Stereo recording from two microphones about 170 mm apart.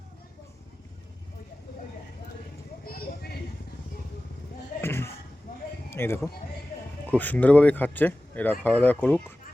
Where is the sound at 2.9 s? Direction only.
65° left (ahead or behind).